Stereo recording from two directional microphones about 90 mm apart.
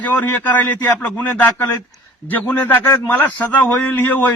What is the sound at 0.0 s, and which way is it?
A man's voice, 20° left (ahead or behind).